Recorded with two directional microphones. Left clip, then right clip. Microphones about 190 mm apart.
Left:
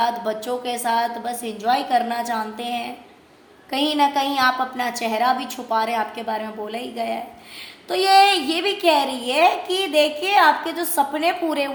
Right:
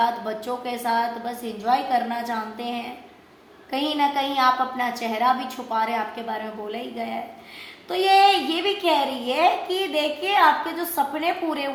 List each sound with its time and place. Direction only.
0.0 s a woman's voice: 50° left (ahead or behind)